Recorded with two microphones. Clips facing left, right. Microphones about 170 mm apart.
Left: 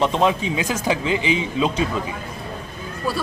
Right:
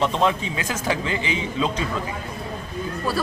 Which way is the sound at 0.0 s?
15° left (ahead or behind).